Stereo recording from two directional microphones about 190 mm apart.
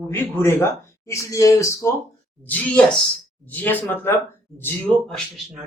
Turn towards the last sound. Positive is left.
turn(degrees=5)  # may be behind; listen again after turning